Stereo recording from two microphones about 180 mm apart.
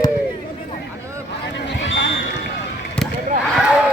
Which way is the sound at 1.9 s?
85° left.